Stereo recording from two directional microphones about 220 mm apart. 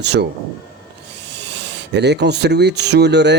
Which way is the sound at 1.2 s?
50° right (ahead or behind).